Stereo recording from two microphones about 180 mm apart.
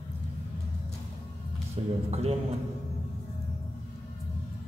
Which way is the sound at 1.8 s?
30° right (ahead or behind).